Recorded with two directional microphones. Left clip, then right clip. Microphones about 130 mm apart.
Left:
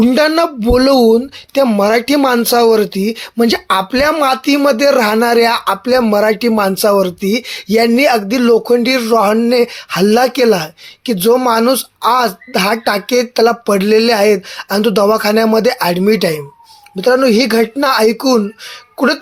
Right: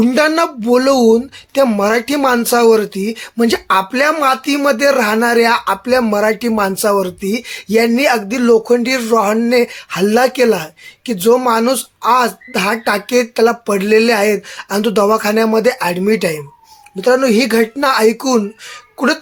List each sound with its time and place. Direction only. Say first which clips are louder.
0.0 s speech: left 1 dB; 25° left (ahead or behind)